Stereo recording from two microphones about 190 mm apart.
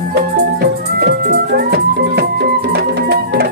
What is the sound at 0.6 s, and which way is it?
Music, 55° right (ahead or behind).